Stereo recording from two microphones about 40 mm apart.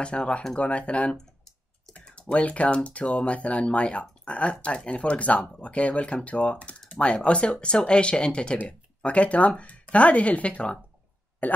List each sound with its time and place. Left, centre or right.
0.0 s speech: left
2.1 s speech: left
11.4 s speech: left